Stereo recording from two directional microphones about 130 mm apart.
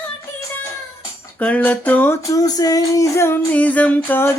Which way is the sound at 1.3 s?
10° left (ahead or behind).